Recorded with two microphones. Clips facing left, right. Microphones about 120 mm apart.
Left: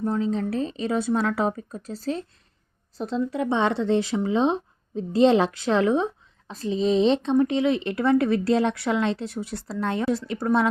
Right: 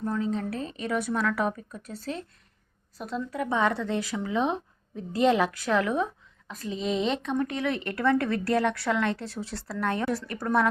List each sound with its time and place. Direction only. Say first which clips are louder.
0.0 s speech: left 4 dB; 25° left (ahead or behind)